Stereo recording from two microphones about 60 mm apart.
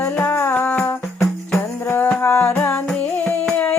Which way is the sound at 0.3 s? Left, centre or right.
Left.